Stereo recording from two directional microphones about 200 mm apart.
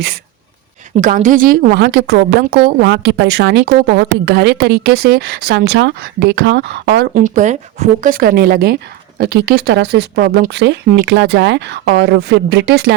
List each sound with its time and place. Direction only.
0.9 s a woman's voice: 40° right (ahead or behind); by 12.9 s 55° right (ahead or behind)